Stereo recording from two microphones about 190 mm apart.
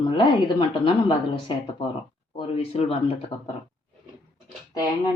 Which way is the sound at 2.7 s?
30° left (ahead or behind).